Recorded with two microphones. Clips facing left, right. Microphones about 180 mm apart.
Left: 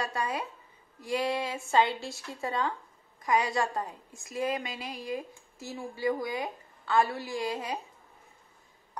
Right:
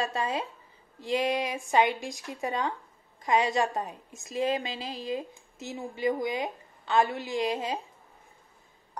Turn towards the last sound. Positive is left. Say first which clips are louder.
# right 3 dB
turn(degrees=-20)  # may be behind; listen again after turning